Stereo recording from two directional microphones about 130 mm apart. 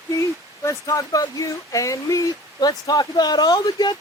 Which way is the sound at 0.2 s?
25° left (ahead or behind).